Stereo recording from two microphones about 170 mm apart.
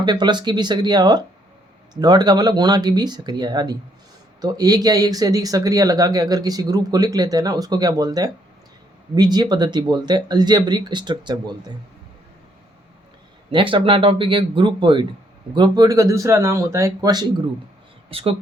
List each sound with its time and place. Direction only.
0.0 s speech: 25° right (ahead or behind)
13.5 s speech: 30° right (ahead or behind)
18.1 s speech: 35° right (ahead or behind)